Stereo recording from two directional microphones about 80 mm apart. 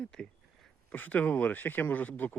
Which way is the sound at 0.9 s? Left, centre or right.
Left.